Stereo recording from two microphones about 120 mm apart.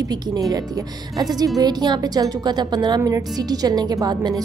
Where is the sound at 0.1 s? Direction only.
30° right (ahead or behind).